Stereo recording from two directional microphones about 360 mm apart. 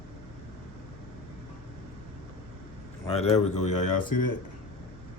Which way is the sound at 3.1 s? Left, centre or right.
Centre.